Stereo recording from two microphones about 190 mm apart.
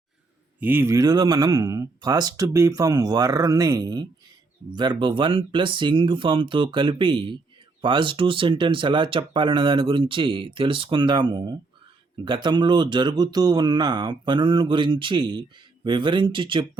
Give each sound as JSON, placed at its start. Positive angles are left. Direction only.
{"t": 0.6, "sound": "speech", "side_deg": -10}